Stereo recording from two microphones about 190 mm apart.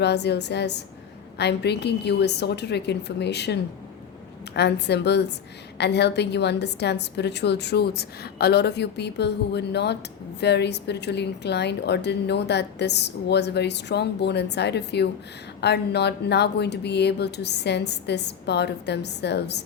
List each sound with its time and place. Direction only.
0.0 s a woman's voice: 60° left (ahead or behind)